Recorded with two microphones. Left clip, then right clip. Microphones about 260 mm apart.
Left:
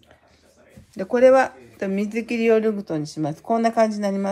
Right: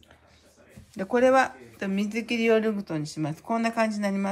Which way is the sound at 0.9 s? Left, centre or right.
Centre.